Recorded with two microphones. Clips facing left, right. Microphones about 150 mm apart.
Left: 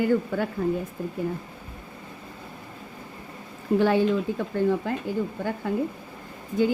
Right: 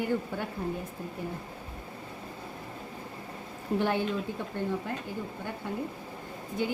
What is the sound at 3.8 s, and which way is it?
A woman's voice, 90° left.